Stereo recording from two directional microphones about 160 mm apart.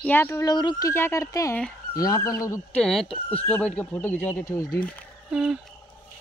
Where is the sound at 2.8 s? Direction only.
Centre (ahead or behind).